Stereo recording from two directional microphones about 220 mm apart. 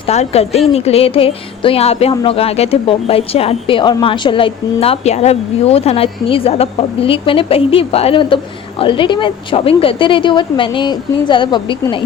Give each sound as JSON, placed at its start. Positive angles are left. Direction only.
{"t": 0.0, "sound": "speech", "side_deg": 30}